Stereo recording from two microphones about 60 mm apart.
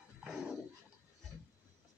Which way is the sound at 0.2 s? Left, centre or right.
Centre.